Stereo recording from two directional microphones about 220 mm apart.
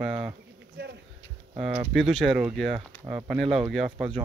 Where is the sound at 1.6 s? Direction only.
5° right (ahead or behind).